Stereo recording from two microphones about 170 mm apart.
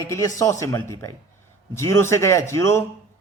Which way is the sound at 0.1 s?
20° left (ahead or behind).